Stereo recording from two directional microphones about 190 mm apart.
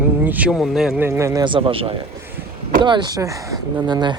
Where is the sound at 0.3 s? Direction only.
5° right (ahead or behind).